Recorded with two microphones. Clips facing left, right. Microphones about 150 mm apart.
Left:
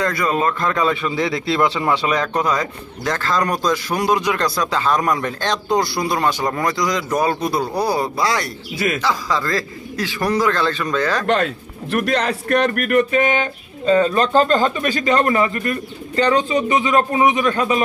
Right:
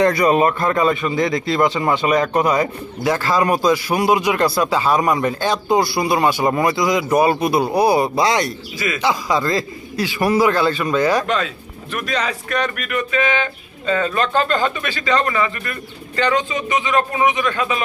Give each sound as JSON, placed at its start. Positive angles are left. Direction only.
{"t": 0.0, "sound": "speech", "side_deg": -20}
{"t": 8.7, "sound": "a man's voice", "side_deg": 50}
{"t": 9.0, "sound": "speech", "side_deg": -15}
{"t": 11.2, "sound": "a man's voice", "side_deg": 60}
{"t": 13.8, "sound": "speech", "side_deg": 30}